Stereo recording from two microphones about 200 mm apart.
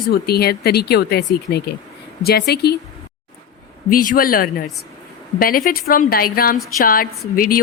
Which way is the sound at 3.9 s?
45° left (ahead or behind).